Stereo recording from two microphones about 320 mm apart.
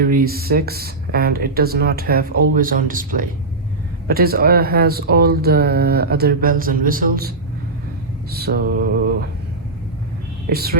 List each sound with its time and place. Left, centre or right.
0.0 s speech: right
10.5 s speech: right